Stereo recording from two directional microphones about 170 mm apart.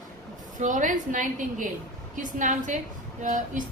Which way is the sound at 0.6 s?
50° right (ahead or behind).